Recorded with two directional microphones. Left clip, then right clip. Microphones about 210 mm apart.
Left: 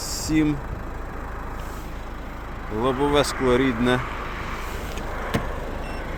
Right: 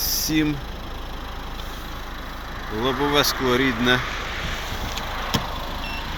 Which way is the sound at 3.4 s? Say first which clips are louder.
Even; 10° left (ahead or behind).